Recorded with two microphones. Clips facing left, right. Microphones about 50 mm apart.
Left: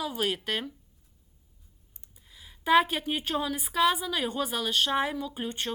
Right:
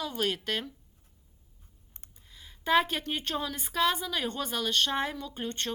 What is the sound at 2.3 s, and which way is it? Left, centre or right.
A woman's voice, centre.